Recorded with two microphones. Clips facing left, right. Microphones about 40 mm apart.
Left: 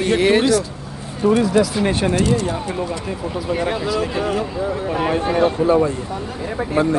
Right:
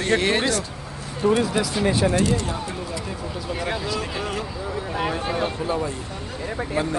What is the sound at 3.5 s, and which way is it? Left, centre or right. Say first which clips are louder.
Speech: left 6 dB; left.